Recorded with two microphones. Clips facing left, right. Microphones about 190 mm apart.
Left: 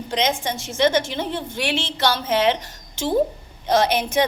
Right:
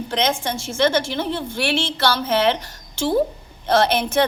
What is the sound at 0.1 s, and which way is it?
A woman's voice, 15° left (ahead or behind).